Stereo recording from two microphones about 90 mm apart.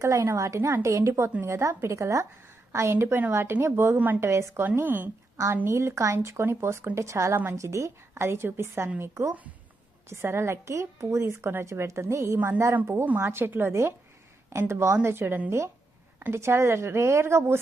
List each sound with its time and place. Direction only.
0.0 s a woman's voice: 35° right (ahead or behind)